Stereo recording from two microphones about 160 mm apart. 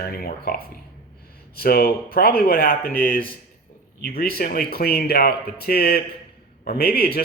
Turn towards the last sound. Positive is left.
turn(degrees=75)  # may be behind; listen again after turning